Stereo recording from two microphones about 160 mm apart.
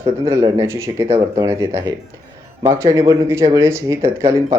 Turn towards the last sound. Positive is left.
turn(degrees=-15)  # may be behind; listen again after turning